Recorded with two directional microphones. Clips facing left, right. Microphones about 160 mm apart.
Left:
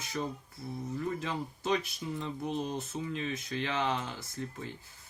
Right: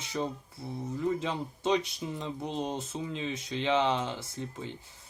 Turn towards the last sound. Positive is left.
turn(degrees=-25)  # may be behind; listen again after turning